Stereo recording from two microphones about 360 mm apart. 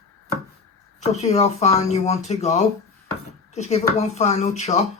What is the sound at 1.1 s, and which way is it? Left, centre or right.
Speech, centre.